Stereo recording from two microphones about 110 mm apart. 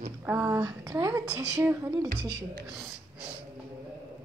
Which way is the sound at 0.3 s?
15° right (ahead or behind).